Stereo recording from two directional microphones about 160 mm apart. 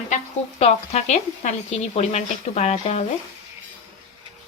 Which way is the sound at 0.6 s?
45° left (ahead or behind).